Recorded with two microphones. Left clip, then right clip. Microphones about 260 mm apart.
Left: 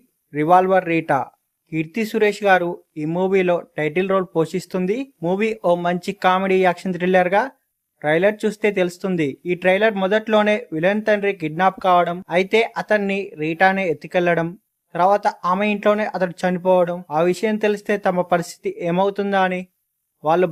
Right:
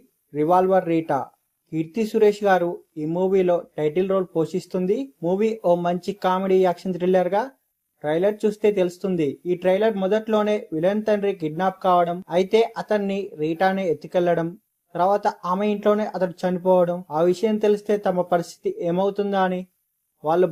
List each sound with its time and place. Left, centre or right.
0.3 s speech: left